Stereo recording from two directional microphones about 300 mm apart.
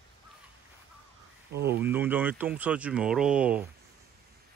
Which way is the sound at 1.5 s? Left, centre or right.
Right.